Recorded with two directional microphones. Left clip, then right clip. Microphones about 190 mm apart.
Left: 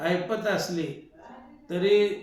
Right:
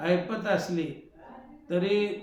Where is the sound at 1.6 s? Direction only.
15° right (ahead or behind).